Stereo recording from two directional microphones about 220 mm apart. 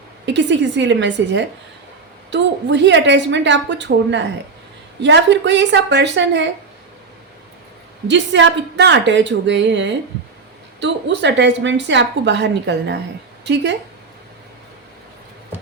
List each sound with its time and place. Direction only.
0.3 s a woman's voice: 55° right (ahead or behind)
8.0 s a woman's voice: 55° right (ahead or behind)